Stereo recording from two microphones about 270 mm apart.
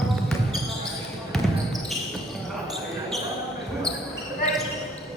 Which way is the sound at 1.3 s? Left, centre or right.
Centre.